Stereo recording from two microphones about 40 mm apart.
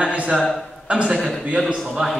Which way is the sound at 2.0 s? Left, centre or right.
Centre.